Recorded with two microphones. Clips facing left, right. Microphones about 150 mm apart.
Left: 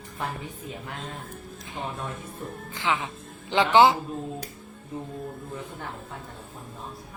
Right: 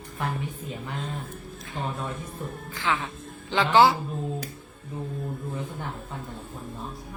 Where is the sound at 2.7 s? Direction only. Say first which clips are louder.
Left 1 dB; 20° left (ahead or behind).